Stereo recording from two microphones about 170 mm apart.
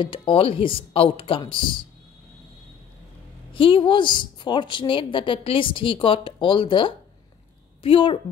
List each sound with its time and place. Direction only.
0.0 s speech: 30° left (ahead or behind)
3.5 s a woman's voice: 30° left (ahead or behind)